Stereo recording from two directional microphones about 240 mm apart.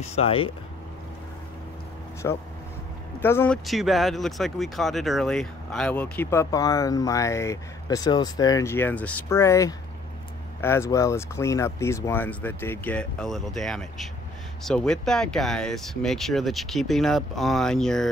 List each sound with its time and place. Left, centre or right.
0.0 s speech: left
2.2 s speech: centre